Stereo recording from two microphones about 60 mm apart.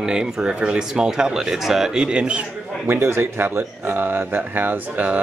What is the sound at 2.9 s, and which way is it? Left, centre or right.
Speech, right.